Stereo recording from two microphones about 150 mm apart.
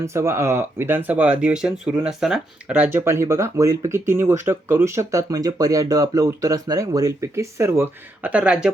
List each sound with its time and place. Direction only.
0.0 s speech: 20° right (ahead or behind)